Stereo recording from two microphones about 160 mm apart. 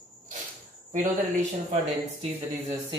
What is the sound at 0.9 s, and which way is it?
Speech, 50° right (ahead or behind).